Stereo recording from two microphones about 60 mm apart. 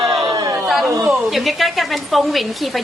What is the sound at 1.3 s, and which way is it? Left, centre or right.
A woman's voice, centre.